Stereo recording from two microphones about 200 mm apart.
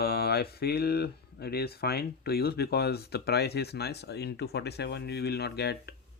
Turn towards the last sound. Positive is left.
turn(degrees=55)  # may be behind; listen again after turning